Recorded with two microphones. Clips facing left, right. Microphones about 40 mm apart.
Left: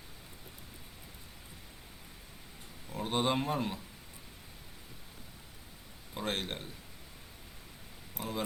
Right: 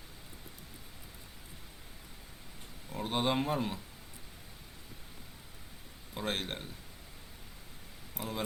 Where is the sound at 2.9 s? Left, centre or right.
Centre.